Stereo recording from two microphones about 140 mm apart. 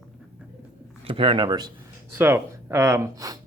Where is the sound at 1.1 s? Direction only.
40° right (ahead or behind).